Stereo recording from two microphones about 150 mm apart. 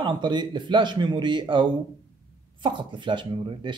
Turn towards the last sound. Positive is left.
turn(degrees=-30)  # may be behind; listen again after turning